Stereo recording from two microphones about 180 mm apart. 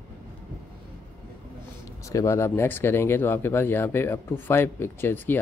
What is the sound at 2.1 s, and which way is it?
Speech, 15° left (ahead or behind).